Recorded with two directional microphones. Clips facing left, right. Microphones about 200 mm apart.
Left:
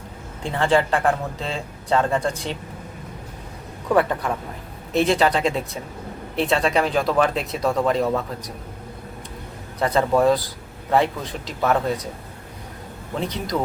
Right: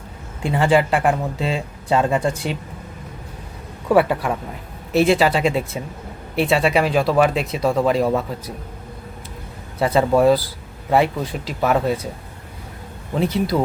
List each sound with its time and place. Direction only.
0.4 s speech: 10° right (ahead or behind)
3.8 s speech: 10° right (ahead or behind)
9.7 s speech: 5° right (ahead or behind)
13.1 s speech: 5° right (ahead or behind)